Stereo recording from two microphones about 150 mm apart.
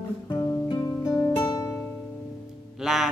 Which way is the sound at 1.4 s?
25° left (ahead or behind).